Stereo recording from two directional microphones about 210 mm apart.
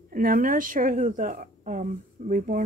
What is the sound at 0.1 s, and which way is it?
A woman's voice, 40° right (ahead or behind).